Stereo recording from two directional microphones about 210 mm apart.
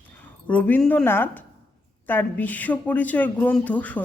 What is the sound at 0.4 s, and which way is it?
A woman's voice, 5° left (ahead or behind).